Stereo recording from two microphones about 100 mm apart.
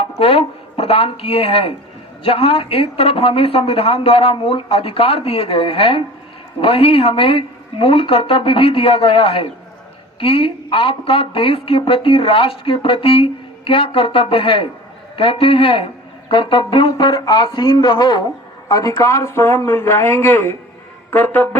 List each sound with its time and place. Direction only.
0.2 s a woman's voice: 70° left (ahead or behind)
16.3 s speech: 50° left (ahead or behind)
18.7 s speech: 35° left (ahead or behind)